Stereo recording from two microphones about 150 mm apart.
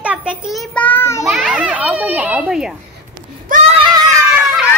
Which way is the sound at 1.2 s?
5° right (ahead or behind).